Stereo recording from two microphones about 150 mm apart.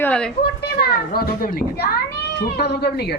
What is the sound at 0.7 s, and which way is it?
A child's voice, 90° left.